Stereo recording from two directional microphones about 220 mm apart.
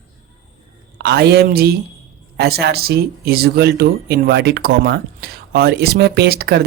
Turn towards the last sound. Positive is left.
turn(degrees=-45)  # may be behind; listen again after turning